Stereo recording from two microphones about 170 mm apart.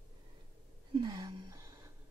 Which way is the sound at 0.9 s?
25° right (ahead or behind).